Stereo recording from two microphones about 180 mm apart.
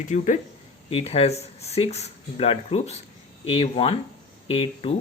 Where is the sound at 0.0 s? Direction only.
45° left (ahead or behind).